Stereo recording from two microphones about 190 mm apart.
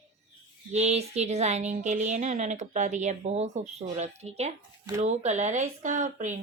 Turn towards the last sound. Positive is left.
turn(degrees=-40)  # may be behind; listen again after turning